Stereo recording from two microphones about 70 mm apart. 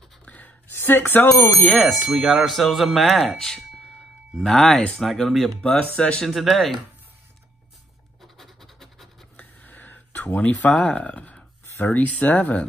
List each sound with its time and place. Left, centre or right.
0.2 s a sound: centre
0.7 s speech: left
1.8 s speech: centre
5.7 s speech: centre
6.2 s speech: centre
8.2 s scratch: centre
9.4 s a sound: left
11.7 s speech: left